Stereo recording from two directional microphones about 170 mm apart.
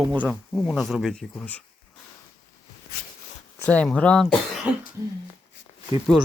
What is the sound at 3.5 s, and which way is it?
Speech, 5° left (ahead or behind).